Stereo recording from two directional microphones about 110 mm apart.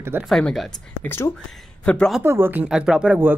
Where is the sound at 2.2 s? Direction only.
20° right (ahead or behind).